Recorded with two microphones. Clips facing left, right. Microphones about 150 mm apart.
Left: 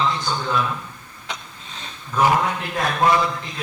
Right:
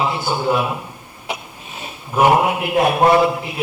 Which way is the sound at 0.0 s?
10° right (ahead or behind).